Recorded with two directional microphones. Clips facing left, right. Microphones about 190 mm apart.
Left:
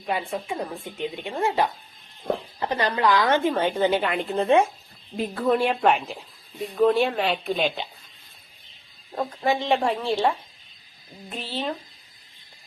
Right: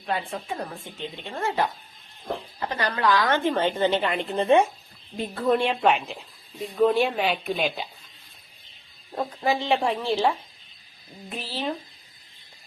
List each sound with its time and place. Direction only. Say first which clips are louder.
0.0 s a woman's voice: left 2 dB; 10° left (ahead or behind)
9.1 s speech: left 1 dB; centre (ahead or behind)
11.3 s speech: left 1 dB; centre (ahead or behind)